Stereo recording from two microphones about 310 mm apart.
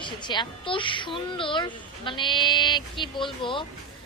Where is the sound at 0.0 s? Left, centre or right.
Centre.